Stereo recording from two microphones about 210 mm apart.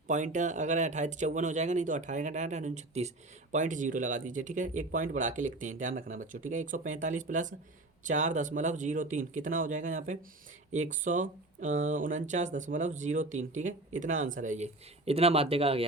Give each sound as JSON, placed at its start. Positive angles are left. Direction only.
{"t": 0.1, "sound": "speech", "side_deg": -35}